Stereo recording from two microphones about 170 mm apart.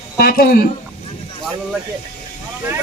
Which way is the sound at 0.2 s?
60° left (ahead or behind).